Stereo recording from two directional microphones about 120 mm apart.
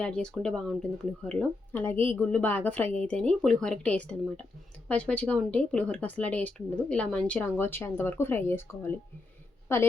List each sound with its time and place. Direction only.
0.0 s speech: 5° left (ahead or behind)
1.7 s a woman's voice: 20° left (ahead or behind)